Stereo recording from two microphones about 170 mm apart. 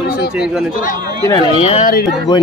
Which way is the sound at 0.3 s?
5° right (ahead or behind).